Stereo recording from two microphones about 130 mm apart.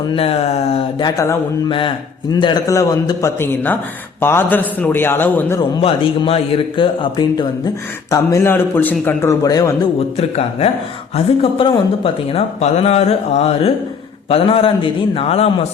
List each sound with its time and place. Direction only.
0.2 s speech: 50° left (ahead or behind)
1.1 s a man's voice: 25° left (ahead or behind)
5.8 s speech: 45° left (ahead or behind)
8.1 s a man's voice: 20° left (ahead or behind)
10.2 s speech: 50° left (ahead or behind)